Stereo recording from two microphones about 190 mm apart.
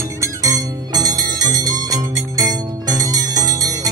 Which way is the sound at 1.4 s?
20° right (ahead or behind).